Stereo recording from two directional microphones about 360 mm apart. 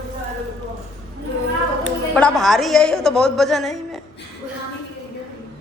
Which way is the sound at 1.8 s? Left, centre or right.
Centre.